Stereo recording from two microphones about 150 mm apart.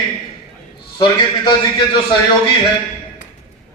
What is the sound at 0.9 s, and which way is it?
A man's voice, 30° left (ahead or behind).